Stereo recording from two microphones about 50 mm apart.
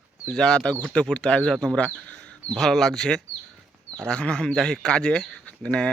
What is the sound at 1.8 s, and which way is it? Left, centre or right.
Speech, left.